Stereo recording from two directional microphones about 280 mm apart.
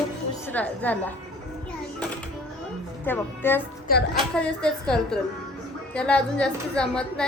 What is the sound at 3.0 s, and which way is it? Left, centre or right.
Speech, centre.